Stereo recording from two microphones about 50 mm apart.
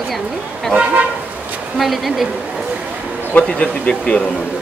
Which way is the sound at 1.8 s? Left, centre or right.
Centre.